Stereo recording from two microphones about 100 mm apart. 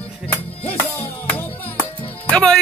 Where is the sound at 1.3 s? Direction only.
15° left (ahead or behind).